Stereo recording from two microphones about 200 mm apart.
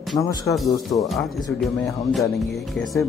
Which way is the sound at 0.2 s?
15° left (ahead or behind).